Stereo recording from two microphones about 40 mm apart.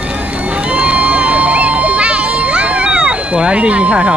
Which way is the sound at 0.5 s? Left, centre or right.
Right.